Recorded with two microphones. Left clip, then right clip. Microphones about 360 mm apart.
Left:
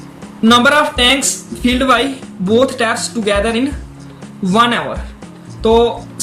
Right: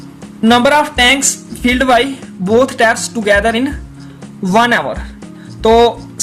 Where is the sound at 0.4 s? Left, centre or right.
Right.